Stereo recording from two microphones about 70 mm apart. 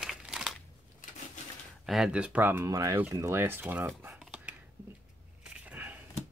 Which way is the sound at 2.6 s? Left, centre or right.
Right.